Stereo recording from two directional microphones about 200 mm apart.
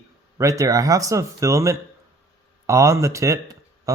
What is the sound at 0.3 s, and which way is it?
Speech, 15° right (ahead or behind).